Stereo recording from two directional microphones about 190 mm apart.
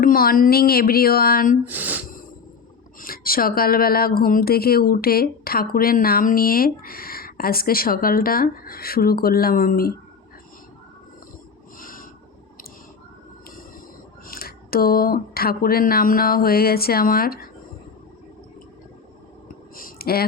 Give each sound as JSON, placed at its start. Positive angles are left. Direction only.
{"t": 0.0, "sound": "speech", "side_deg": 50}
{"t": 1.6, "sound": "speech", "side_deg": -10}
{"t": 3.0, "sound": "speech", "side_deg": 50}
{"t": 11.8, "sound": "a sound", "side_deg": 45}
{"t": 14.3, "sound": "speech", "side_deg": 50}
{"t": 19.7, "sound": "a sound", "side_deg": 50}